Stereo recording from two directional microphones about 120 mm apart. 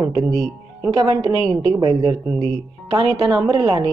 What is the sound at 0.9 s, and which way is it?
A woman's voice, 40° right (ahead or behind).